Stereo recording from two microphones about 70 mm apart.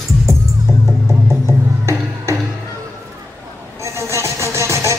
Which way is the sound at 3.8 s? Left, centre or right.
Right.